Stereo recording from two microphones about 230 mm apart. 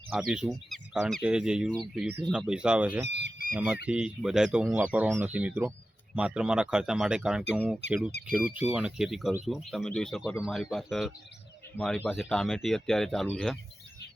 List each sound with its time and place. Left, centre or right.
0.1 s speech: centre
3.1 s fowl: right
3.5 s speech: centre